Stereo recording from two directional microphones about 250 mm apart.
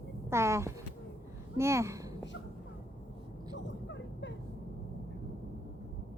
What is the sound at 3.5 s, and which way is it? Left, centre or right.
Vehicle, left.